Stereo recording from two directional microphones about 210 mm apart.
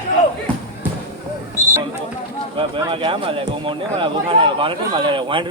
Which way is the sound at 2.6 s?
25° right (ahead or behind).